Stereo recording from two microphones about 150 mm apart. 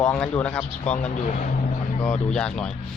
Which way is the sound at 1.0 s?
55° left (ahead or behind).